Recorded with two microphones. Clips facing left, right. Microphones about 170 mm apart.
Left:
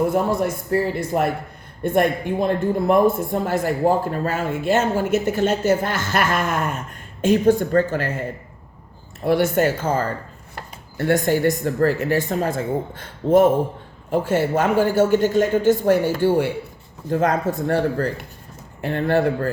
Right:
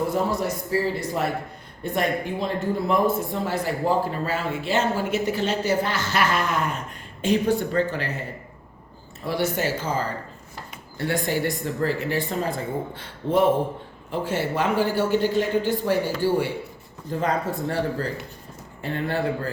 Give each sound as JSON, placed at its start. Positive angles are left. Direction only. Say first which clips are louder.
{"t": 0.1, "sound": "speech", "louder": "left 4 dB", "side_deg": 55}
{"t": 9.2, "sound": "speech", "louder": "left 7 dB", "side_deg": 55}